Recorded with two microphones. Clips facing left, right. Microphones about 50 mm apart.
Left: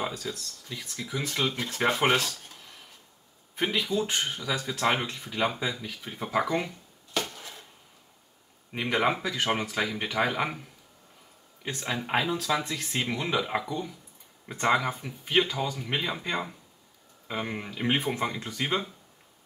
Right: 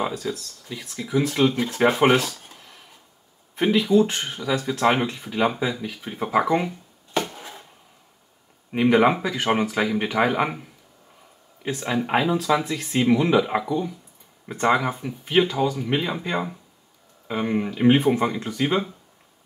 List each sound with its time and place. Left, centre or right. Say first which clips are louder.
0.0 s speech: right 6 dB; centre
7.2 s a sound: right 6 dB; right
8.7 s speech: right 9 dB; centre
11.6 s speech: right 7 dB; centre